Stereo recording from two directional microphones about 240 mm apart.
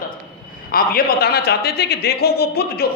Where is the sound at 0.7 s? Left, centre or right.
Left.